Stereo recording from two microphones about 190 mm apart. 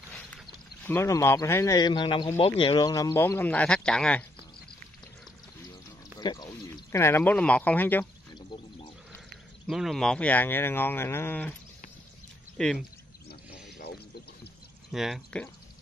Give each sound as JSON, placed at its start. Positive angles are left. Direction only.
{"t": 0.8, "sound": "speech", "side_deg": 15}
{"t": 6.1, "sound": "speech", "side_deg": 20}
{"t": 8.4, "sound": "a sound", "side_deg": 25}
{"t": 9.7, "sound": "speech", "side_deg": 0}
{"t": 12.5, "sound": "speech", "side_deg": 5}
{"t": 13.7, "sound": "a sound", "side_deg": 55}
{"t": 14.9, "sound": "speech", "side_deg": 0}